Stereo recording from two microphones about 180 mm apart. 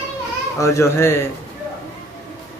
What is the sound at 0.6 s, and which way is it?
Speech, 15° left (ahead or behind).